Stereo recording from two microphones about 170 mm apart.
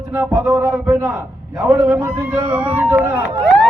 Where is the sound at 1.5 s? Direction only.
5° right (ahead or behind).